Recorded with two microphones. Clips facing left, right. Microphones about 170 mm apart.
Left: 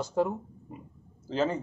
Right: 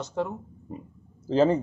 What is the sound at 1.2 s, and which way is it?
Speech, 35° right (ahead or behind).